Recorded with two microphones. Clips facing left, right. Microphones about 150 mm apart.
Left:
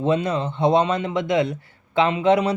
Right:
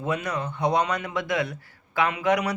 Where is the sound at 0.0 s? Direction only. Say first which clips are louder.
Left 7 dB; 25° left (ahead or behind).